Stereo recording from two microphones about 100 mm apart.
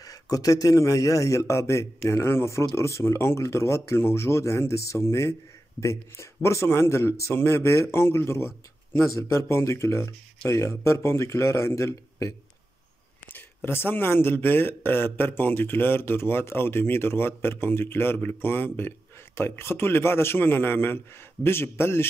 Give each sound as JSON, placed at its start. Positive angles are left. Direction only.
{"t": 0.0, "sound": "speech", "side_deg": 35}
{"t": 13.3, "sound": "speech", "side_deg": 20}